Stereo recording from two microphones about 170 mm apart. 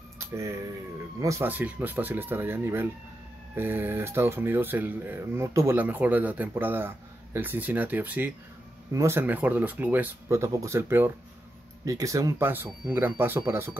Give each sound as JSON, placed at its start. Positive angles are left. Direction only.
{"t": 0.2, "sound": "speech", "side_deg": -15}